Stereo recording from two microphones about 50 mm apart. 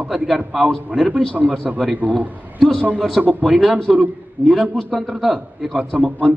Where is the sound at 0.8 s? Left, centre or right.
Right.